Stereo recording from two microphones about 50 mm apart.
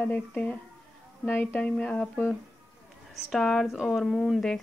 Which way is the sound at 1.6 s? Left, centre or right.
Left.